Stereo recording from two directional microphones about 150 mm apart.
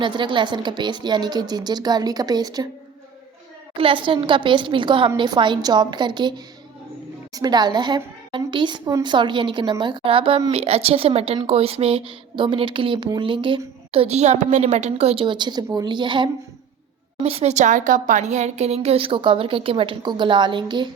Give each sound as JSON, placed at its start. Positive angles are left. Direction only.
{"t": 0.0, "sound": "a woman's voice", "side_deg": -30}
{"t": 3.8, "sound": "speech", "side_deg": -35}
{"t": 7.3, "sound": "speech", "side_deg": -25}
{"t": 17.2, "sound": "speech", "side_deg": -45}